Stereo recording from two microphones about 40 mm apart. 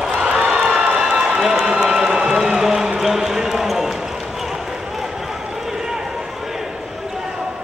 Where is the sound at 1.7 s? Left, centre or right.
Right.